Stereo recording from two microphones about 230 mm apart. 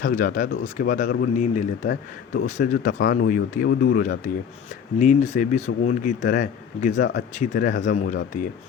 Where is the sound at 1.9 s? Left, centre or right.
Left.